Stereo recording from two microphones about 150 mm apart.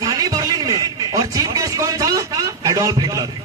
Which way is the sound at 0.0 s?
25° right (ahead or behind).